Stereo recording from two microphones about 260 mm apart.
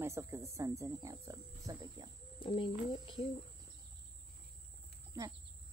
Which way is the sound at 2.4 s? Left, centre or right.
Left.